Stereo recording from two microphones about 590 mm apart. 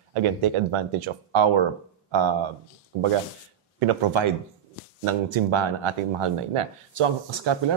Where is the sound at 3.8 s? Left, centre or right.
Right.